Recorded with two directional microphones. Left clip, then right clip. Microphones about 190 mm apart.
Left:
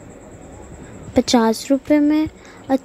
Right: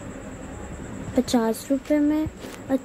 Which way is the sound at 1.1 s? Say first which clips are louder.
Left 7 dB; 35° left (ahead or behind).